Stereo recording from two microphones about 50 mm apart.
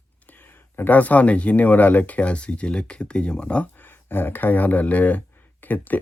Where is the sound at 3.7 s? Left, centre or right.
Left.